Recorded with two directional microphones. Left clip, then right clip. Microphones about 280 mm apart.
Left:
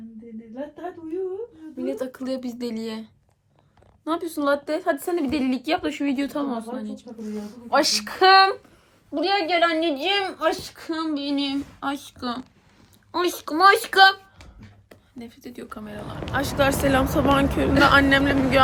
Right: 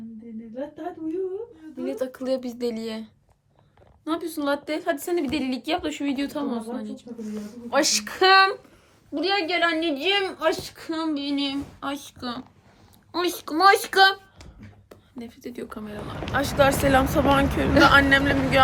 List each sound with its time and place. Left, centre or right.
1.9 s a woman's voice: centre
4.0 s a woman's voice: centre
15.2 s speech: centre
16.2 s speech: centre